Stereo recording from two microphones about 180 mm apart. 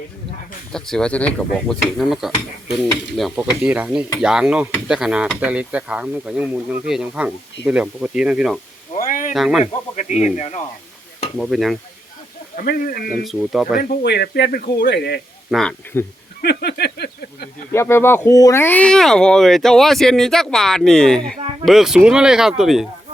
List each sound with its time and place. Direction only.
0.7 s stir: 5° left (ahead or behind)
9.0 s a sound: 45° left (ahead or behind)
9.3 s stir: centre (ahead or behind)
9.9 s speech: 40° left (ahead or behind)
11.3 s stir: centre (ahead or behind)
12.5 s speech: 50° left (ahead or behind)
13.2 s stir: centre (ahead or behind)
13.7 s a man's voice: 55° left (ahead or behind)
15.4 s speech: centre (ahead or behind)
15.9 s speech: 15° left (ahead or behind)
16.4 s a sound: 65° left (ahead or behind)
17.7 s stir: 15° left (ahead or behind); by 22.9 s centre (ahead or behind)